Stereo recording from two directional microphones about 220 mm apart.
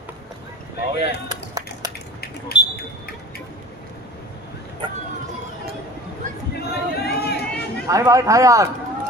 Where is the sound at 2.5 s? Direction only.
45° left (ahead or behind).